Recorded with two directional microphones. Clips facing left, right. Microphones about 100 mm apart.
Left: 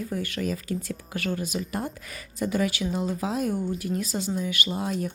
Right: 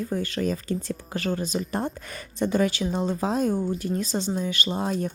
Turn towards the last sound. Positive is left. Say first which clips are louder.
# right 2 dB
turn(degrees=-35)  # may be behind; listen again after turning